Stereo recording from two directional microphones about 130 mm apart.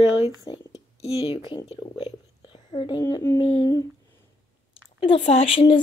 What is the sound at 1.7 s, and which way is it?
Whispering, 45° left (ahead or behind).